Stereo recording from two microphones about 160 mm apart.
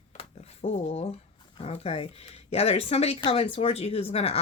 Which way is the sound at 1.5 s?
40° left (ahead or behind).